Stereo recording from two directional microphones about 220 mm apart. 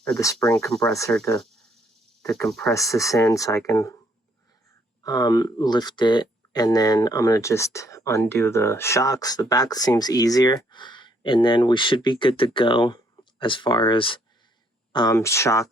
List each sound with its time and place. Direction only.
0.0 s speech: 10° left (ahead or behind)
2.7 s speech: 15° left (ahead or behind)
5.0 s speech: 15° left (ahead or behind)